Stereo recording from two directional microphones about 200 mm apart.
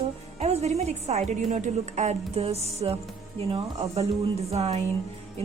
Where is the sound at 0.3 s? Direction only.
30° right (ahead or behind).